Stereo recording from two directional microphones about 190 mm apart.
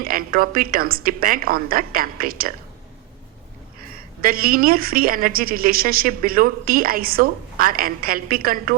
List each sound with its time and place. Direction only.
0.0 s a woman's voice: 50° right (ahead or behind)
4.2 s a woman's voice: 50° right (ahead or behind)